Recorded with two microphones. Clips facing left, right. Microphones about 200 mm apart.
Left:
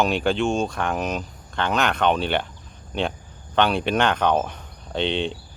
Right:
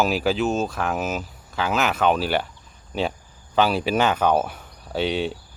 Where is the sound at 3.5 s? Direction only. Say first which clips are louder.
Even; 5° right (ahead or behind).